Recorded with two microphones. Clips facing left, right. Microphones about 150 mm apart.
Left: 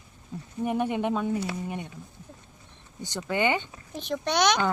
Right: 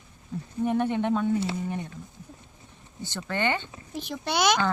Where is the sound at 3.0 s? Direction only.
15° left (ahead or behind).